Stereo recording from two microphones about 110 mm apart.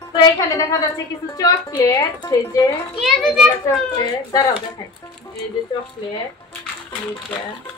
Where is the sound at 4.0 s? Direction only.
35° left (ahead or behind).